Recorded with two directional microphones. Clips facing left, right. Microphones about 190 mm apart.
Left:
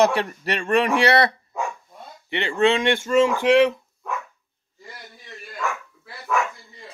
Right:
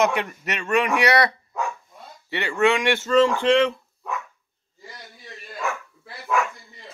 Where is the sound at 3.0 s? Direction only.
10° left (ahead or behind).